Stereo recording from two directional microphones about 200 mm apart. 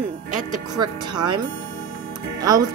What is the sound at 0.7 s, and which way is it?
Speech, 20° right (ahead or behind).